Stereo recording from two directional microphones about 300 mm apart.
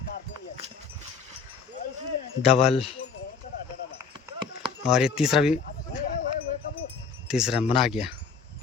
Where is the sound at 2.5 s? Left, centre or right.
Left.